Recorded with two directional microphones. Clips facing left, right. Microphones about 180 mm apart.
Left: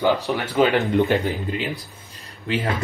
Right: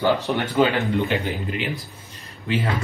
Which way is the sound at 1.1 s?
35° left (ahead or behind).